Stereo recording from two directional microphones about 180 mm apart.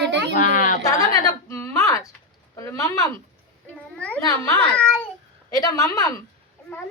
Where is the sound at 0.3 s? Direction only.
45° left (ahead or behind).